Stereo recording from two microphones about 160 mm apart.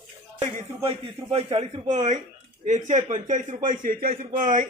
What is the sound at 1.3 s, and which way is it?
Speech, 40° right (ahead or behind).